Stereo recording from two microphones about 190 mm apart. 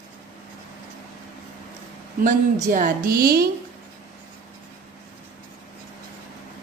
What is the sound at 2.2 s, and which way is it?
A woman's voice, 40° right (ahead or behind).